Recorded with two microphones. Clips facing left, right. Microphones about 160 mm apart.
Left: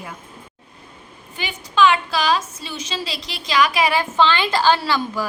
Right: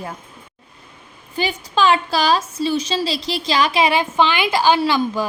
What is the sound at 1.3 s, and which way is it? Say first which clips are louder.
A woman's voice: right 1 dB; 35° right (ahead or behind).